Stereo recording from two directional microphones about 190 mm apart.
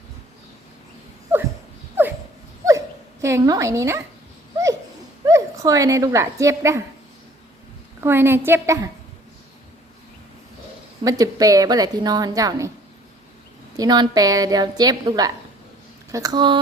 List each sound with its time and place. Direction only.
2.6 s dog: 15° right (ahead or behind)
5.2 s speech: 15° right (ahead or behind)
8.0 s a woman's voice: 10° right (ahead or behind)
11.0 s a woman's voice: 20° right (ahead or behind)
13.7 s a woman's voice: 20° right (ahead or behind)